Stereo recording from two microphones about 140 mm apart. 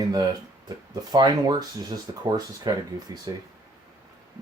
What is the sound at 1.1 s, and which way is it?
Speech, 30° right (ahead or behind).